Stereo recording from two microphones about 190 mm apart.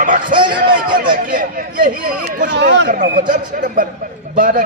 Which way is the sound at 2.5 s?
65° right (ahead or behind).